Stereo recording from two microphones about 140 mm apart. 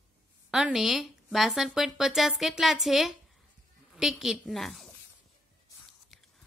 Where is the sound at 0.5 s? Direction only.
5° right (ahead or behind).